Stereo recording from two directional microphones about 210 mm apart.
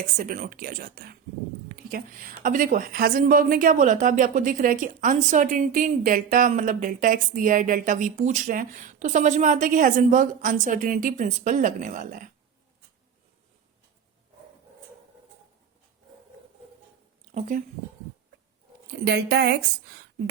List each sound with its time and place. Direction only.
0.0 s a woman's voice: 40° right (ahead or behind)
19.0 s speech: 50° right (ahead or behind)